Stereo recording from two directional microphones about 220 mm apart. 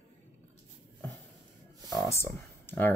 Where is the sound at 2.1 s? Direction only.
10° left (ahead or behind).